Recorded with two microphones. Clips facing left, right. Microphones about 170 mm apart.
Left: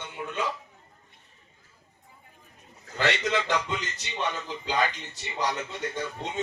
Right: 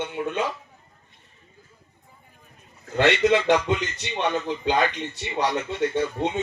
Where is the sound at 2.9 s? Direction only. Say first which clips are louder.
Right 8 dB; 65° right (ahead or behind).